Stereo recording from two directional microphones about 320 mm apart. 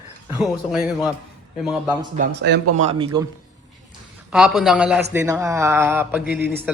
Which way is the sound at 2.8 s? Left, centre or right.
Centre.